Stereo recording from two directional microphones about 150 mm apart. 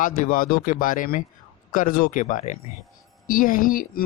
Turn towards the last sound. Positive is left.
turn(degrees=65)  # may be behind; listen again after turning